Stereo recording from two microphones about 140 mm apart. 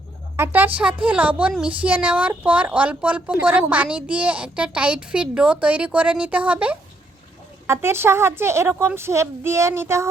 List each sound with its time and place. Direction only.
0.3 s speech: 15° right (ahead or behind)